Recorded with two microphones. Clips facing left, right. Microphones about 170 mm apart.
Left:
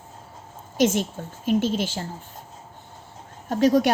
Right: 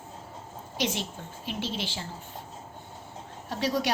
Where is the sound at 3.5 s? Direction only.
45° left (ahead or behind).